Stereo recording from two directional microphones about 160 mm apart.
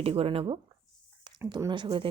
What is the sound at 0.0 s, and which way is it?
Speech, 35° right (ahead or behind).